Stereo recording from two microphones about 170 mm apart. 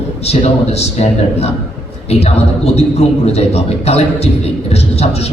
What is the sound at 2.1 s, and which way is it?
A man's voice, 40° left (ahead or behind).